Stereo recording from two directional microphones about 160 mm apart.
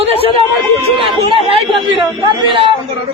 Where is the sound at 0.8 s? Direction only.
35° right (ahead or behind).